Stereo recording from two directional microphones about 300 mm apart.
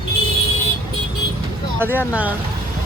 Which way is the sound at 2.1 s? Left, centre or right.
Centre.